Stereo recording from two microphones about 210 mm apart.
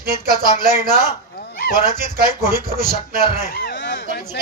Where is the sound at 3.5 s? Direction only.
50° left (ahead or behind).